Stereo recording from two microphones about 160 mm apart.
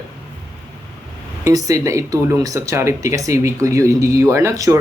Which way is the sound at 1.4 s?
20° right (ahead or behind).